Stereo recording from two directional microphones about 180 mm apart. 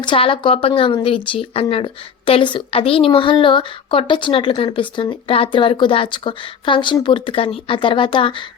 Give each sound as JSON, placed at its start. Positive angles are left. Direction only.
{"t": 0.0, "sound": "speech", "side_deg": 30}